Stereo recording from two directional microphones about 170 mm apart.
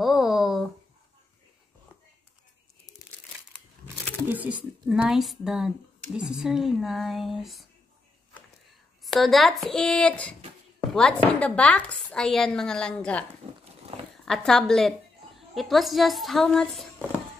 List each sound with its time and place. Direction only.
0.0 s a sound: centre (ahead or behind)
3.8 s a woman's voice: 10° right (ahead or behind)
9.0 s a woman's voice: centre (ahead or behind)
13.4 s wild animals: 35° right (ahead or behind)
14.1 s a woman's voice: 5° left (ahead or behind)